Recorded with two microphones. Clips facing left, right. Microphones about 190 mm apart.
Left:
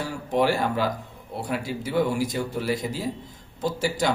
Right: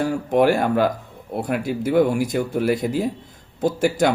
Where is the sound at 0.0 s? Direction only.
55° right (ahead or behind).